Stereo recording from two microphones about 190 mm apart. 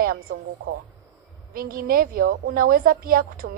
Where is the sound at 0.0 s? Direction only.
50° right (ahead or behind).